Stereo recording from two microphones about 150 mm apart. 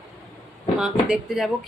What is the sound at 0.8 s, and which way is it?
Speech, 5° right (ahead or behind).